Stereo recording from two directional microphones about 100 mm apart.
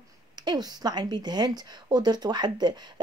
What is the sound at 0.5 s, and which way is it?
Speech, 45° right (ahead or behind).